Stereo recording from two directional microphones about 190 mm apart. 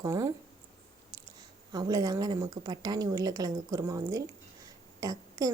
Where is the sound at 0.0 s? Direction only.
15° right (ahead or behind).